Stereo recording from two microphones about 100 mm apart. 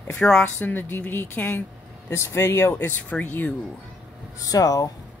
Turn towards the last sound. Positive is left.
turn(degrees=40)  # may be behind; listen again after turning